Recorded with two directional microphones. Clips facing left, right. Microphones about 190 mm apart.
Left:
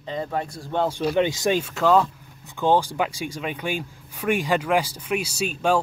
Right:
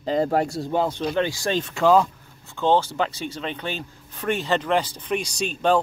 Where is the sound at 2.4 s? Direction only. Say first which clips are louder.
Even; 15° left (ahead or behind).